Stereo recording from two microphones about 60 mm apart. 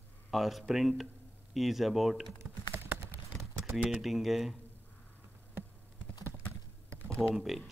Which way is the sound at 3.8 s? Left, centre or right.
Centre.